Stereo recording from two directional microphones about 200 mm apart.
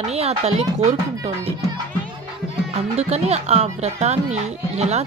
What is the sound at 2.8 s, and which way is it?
Speech, 30° right (ahead or behind).